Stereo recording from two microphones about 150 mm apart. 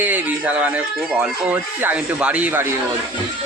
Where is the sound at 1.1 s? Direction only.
5° right (ahead or behind).